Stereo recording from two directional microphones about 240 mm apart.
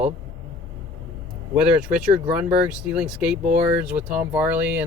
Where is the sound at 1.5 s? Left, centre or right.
Centre.